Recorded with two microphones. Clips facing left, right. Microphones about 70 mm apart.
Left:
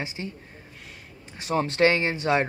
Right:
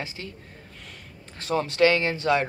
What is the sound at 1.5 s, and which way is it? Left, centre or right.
Speech, left.